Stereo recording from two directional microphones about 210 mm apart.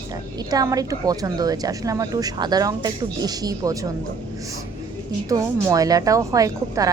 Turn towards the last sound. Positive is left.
turn(degrees=-15)  # may be behind; listen again after turning